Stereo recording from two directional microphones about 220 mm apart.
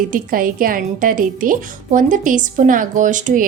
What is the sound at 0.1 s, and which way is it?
A woman's voice, 40° right (ahead or behind).